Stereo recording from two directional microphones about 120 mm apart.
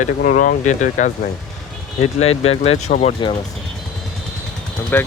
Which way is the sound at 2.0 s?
60° left (ahead or behind).